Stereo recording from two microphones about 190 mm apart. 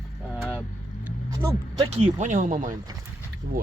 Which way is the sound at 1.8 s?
35° right (ahead or behind).